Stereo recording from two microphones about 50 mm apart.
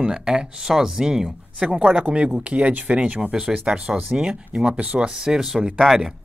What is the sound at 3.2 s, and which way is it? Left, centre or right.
Speech, centre.